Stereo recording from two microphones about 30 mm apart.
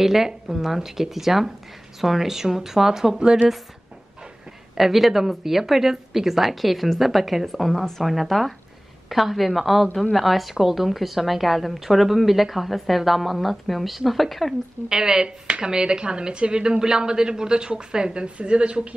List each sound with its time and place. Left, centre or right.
0.0 s a woman's voice: centre
4.7 s a woman's voice: centre
14.9 s speech: right
15.2 s speech: right
18.2 s a woman's voice: right